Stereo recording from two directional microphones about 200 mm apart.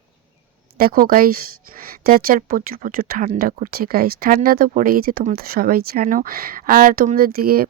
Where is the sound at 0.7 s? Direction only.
45° right (ahead or behind).